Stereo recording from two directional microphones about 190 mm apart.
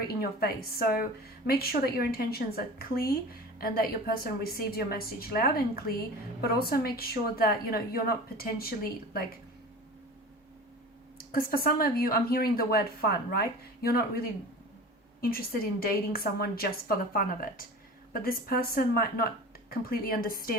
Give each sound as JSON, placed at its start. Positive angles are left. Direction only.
{"t": 0.2, "sound": "a woman's voice", "side_deg": 55}
{"t": 11.3, "sound": "a woman's voice", "side_deg": 50}